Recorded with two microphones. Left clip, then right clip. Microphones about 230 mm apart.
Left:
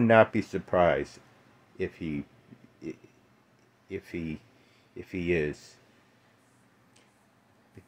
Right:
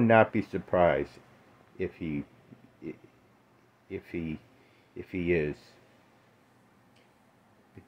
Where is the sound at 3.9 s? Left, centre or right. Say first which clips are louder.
Even; centre.